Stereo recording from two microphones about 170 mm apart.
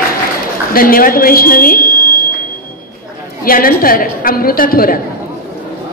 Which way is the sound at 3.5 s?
55° left (ahead or behind).